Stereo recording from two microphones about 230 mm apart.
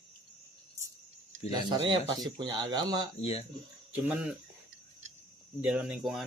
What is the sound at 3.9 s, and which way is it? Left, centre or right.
Speech, centre.